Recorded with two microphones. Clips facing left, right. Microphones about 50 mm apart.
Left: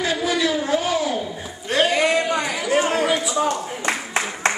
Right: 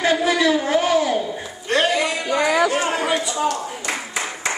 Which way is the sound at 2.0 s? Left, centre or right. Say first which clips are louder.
Left 3 dB; left.